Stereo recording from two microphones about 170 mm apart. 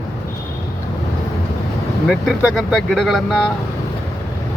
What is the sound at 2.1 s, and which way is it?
Speech, centre (ahead or behind).